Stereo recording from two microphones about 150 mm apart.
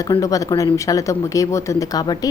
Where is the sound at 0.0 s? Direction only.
25° left (ahead or behind).